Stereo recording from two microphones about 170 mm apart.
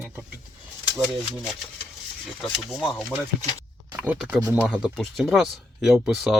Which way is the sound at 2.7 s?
Centre (ahead or behind).